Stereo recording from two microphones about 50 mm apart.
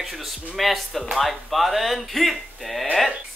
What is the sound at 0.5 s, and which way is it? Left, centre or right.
A man's voice, centre.